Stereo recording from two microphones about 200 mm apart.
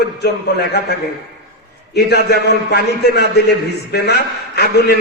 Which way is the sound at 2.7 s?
55° left (ahead or behind).